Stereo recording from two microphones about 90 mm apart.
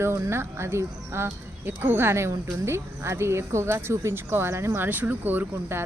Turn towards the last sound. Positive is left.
turn(degrees=-25)  # may be behind; listen again after turning